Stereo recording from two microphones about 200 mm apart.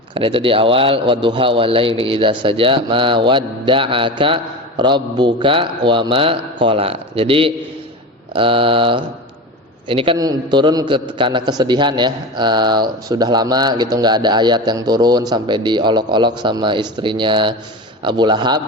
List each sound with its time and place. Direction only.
0.1 s a man's voice: 25° right (ahead or behind)